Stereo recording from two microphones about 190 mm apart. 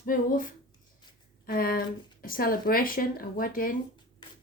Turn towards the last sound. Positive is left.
turn(degrees=45)  # may be behind; listen again after turning